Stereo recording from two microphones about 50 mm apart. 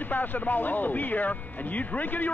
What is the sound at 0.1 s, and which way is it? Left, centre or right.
Speech, left.